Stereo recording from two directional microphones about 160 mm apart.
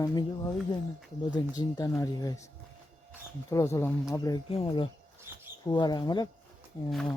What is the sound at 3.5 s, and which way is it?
Speech, 20° left (ahead or behind).